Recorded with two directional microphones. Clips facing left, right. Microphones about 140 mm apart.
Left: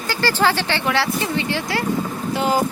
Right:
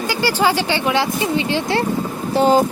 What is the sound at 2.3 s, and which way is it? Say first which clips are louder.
Speech: right 6 dB; 35° right (ahead or behind).